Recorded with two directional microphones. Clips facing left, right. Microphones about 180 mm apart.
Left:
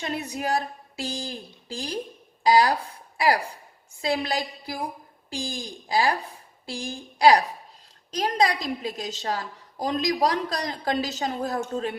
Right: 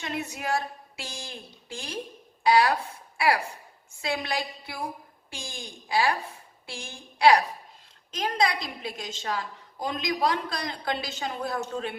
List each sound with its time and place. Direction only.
0.0 s a woman's voice: 35° left (ahead or behind)